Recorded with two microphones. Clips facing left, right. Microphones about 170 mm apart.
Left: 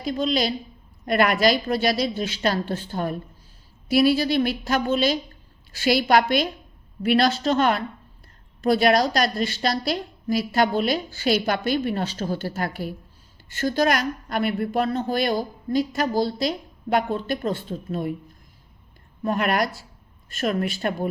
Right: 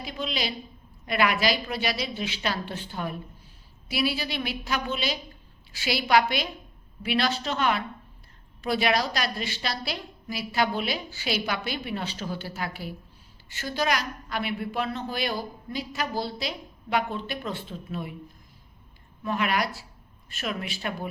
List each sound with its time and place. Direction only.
0.0 s a woman's voice: 40° left (ahead or behind)
19.2 s a woman's voice: 45° left (ahead or behind)